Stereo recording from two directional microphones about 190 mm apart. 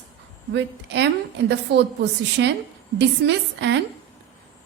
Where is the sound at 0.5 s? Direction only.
70° right (ahead or behind).